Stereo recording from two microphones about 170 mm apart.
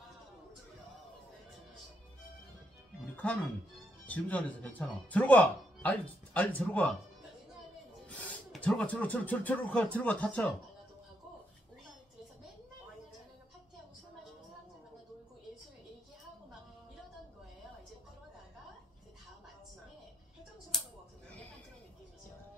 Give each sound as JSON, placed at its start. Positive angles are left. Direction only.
{"t": 4.0, "sound": "speech", "side_deg": 10}
{"t": 8.1, "sound": "speech", "side_deg": 5}
{"t": 20.7, "sound": "a sound", "side_deg": 0}